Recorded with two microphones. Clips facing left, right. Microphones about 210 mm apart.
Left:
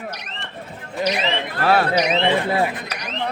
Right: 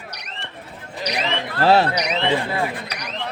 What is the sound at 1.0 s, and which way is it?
Speech, 55° left (ahead or behind).